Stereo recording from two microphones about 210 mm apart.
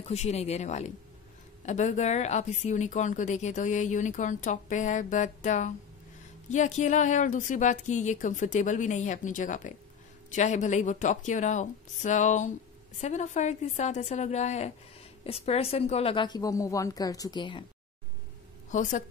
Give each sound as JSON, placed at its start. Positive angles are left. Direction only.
{"t": 0.0, "sound": "a woman's voice", "side_deg": 30}
{"t": 18.7, "sound": "a woman's voice", "side_deg": 35}